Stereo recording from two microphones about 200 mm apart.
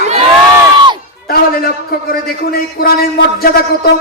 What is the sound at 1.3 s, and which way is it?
A man's voice, 50° left (ahead or behind).